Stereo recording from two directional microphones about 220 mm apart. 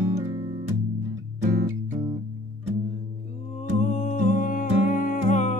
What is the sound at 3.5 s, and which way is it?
Music, 30° left (ahead or behind).